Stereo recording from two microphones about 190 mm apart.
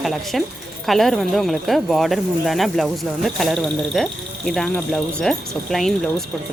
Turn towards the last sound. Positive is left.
turn(degrees=0)  # may be behind; listen again after turning